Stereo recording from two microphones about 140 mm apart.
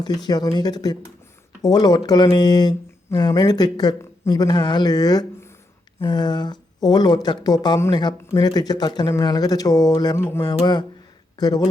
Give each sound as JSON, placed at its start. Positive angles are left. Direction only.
{"t": 0.3, "sound": "speech", "side_deg": 30}